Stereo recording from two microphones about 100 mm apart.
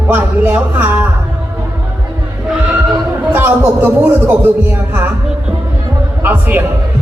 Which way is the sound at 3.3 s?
20° right (ahead or behind).